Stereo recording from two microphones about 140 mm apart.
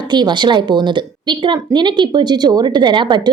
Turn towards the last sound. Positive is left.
turn(degrees=-35)  # may be behind; listen again after turning